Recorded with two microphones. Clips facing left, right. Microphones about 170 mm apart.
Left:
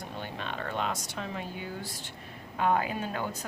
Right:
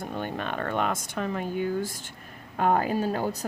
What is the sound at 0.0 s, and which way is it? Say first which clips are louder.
Speech: right 6 dB; 50° right (ahead or behind).